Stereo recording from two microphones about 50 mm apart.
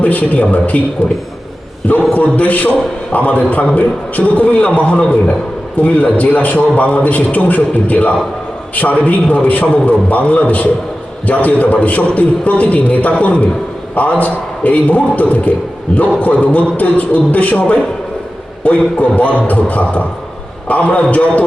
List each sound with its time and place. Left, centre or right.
0.0 s a man's voice: left
1.9 s a man's voice: left